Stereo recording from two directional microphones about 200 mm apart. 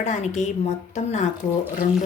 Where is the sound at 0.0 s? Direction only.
35° left (ahead or behind).